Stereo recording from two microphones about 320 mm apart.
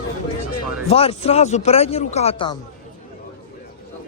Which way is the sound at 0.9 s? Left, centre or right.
Centre.